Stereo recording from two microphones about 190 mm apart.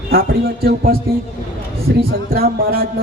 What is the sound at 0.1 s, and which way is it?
Speech, 50° right (ahead or behind).